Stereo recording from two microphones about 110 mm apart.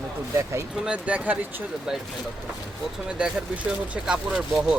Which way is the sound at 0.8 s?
10° right (ahead or behind).